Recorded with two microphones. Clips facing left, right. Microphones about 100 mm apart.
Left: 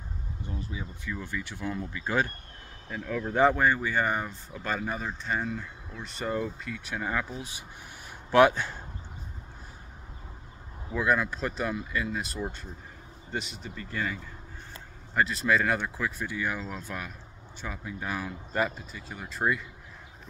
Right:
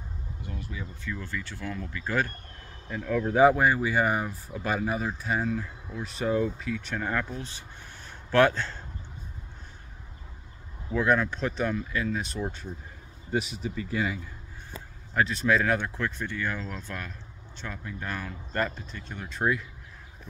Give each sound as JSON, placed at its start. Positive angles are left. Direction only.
{"t": 0.5, "sound": "speech", "side_deg": 25}
{"t": 2.9, "sound": "speech", "side_deg": 0}
{"t": 10.9, "sound": "speech", "side_deg": 5}